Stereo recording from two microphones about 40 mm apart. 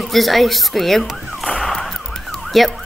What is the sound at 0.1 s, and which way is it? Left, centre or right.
A woman's voice, centre.